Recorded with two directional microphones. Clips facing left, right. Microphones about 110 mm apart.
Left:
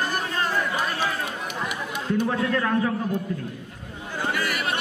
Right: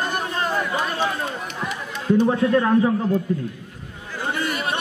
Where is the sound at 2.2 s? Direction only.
20° right (ahead or behind).